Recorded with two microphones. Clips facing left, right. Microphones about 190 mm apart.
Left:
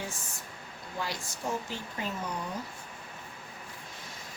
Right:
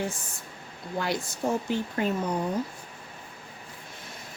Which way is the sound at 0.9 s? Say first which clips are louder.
Right 7 dB; 60° right (ahead or behind).